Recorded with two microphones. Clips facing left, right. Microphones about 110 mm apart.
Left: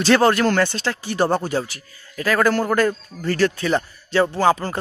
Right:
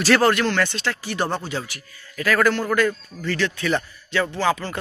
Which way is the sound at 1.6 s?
30° left (ahead or behind).